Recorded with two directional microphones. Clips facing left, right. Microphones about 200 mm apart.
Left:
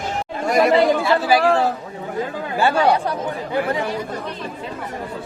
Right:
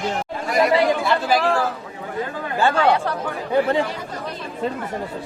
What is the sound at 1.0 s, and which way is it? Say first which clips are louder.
Speech: left 3 dB; 5° left (ahead or behind).